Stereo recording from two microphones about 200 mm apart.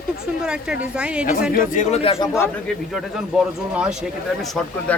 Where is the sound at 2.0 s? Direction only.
25° left (ahead or behind).